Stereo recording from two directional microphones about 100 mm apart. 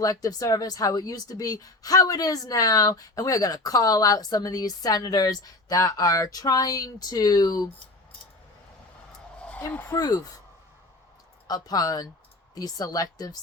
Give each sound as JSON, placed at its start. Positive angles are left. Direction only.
{"t": 0.0, "sound": "speech", "side_deg": 35}
{"t": 9.4, "sound": "a sound", "side_deg": 15}
{"t": 10.0, "sound": "speech", "side_deg": 40}
{"t": 11.4, "sound": "speech", "side_deg": 40}